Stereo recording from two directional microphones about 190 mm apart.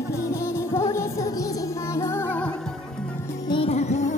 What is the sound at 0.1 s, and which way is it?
Music, 15° left (ahead or behind).